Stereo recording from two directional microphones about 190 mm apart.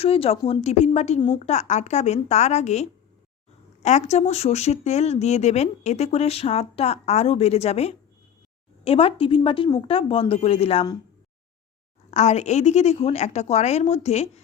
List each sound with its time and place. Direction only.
0.0 s speech: 30° left (ahead or behind)
12.1 s speech: 35° left (ahead or behind)